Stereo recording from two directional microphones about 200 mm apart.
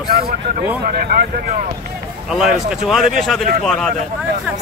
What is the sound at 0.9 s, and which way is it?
Speech, 50° right (ahead or behind).